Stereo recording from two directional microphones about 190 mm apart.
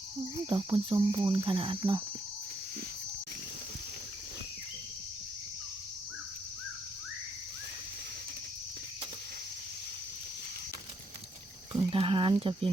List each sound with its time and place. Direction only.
0.4 s cricket: 25° right (ahead or behind)
11.7 s speech: 30° right (ahead or behind)